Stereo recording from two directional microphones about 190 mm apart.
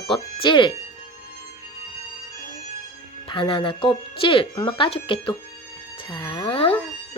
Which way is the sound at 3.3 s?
25° left (ahead or behind).